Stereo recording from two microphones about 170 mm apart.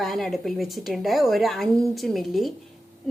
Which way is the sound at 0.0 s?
Centre (ahead or behind).